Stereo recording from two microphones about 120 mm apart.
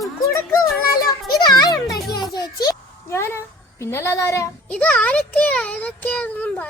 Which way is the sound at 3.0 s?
20° left (ahead or behind).